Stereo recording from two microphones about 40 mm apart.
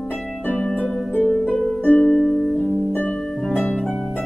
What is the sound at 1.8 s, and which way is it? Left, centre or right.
Music, left.